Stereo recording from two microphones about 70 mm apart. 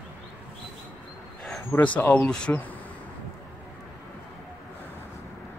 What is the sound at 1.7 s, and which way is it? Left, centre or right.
Speech, left.